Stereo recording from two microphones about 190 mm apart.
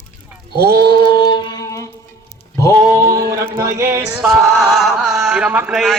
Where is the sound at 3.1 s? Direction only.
20° right (ahead or behind).